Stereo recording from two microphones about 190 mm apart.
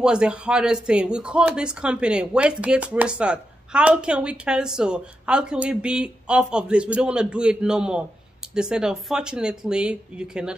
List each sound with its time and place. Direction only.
0.0 s speech: 5° right (ahead or behind)